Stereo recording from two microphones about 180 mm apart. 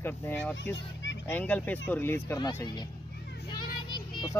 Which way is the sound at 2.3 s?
25° left (ahead or behind).